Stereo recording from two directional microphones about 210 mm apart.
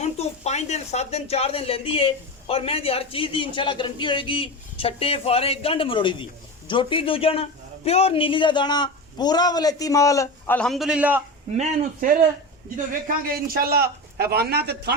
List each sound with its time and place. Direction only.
0.0 s speech: 30° left (ahead or behind); by 11.2 s 5° right (ahead or behind)
11.5 s a man's voice: 35° right (ahead or behind)